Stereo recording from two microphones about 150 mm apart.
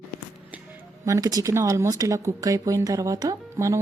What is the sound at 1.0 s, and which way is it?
Speech, 20° right (ahead or behind).